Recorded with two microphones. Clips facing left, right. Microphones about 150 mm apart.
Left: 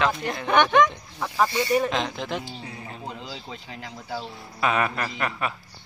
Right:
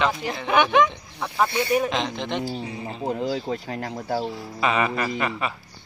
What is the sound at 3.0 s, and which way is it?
Speech, 50° right (ahead or behind).